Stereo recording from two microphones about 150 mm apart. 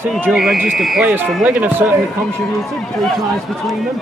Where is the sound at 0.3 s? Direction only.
Centre (ahead or behind).